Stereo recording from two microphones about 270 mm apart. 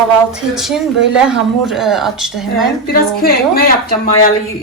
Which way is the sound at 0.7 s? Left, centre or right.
Centre.